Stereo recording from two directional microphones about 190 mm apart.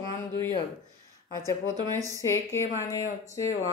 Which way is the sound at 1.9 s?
15° right (ahead or behind).